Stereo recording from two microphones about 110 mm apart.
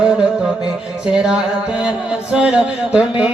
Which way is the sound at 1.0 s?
10° right (ahead or behind).